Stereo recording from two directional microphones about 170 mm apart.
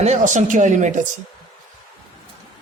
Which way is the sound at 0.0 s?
45° right (ahead or behind).